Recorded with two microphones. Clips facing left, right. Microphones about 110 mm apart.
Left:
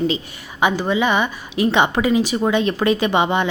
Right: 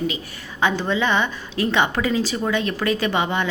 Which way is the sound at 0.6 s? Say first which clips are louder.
Left 3 dB; 10° left (ahead or behind).